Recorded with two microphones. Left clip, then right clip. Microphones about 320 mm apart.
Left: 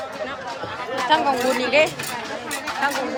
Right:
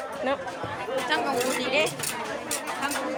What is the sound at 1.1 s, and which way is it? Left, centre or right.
Speech, left.